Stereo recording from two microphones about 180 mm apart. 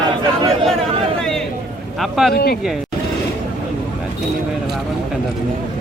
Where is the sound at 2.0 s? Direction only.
Centre (ahead or behind).